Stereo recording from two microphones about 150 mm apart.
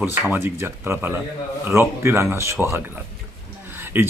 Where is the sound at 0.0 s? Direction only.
15° right (ahead or behind).